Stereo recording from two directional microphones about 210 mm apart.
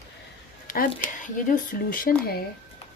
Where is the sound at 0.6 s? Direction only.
40° left (ahead or behind).